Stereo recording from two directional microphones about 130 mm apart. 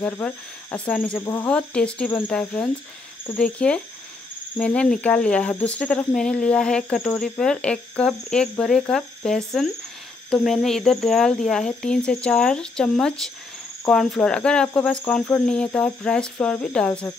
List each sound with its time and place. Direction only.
0.0 s cricket: 10° left (ahead or behind)